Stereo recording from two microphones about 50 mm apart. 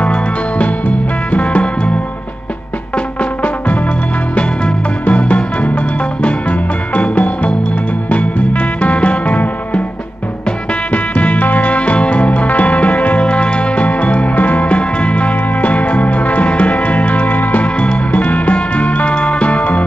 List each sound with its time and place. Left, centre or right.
0.0 s music: left
4.4 s music: left
10.9 s music: left